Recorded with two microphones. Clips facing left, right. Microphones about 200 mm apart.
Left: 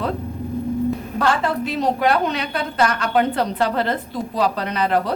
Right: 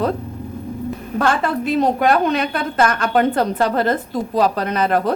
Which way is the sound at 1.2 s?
50° right (ahead or behind).